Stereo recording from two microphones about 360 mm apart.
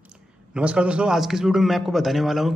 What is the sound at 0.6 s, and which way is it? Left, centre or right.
A man's voice, centre.